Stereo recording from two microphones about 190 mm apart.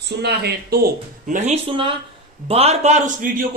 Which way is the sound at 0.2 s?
60° right (ahead or behind).